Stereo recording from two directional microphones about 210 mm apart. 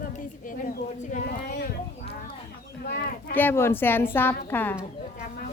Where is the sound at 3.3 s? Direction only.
10° left (ahead or behind).